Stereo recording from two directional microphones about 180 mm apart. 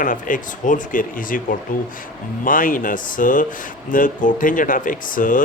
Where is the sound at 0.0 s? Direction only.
50° left (ahead or behind).